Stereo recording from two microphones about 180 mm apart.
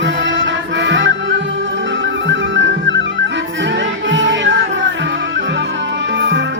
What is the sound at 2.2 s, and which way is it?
Music, 90° right.